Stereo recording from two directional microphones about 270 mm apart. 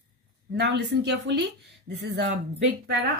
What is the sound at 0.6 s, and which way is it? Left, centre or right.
Speech, right.